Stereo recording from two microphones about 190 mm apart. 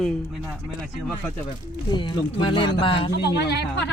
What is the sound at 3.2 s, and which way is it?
Speech, 60° left (ahead or behind).